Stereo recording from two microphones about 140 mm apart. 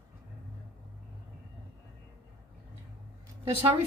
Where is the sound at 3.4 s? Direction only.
40° right (ahead or behind).